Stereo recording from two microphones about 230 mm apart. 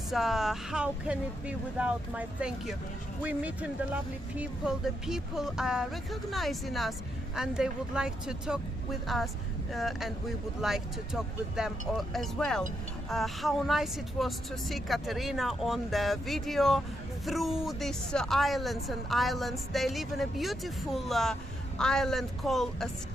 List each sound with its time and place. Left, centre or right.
0.1 s a woman's voice: centre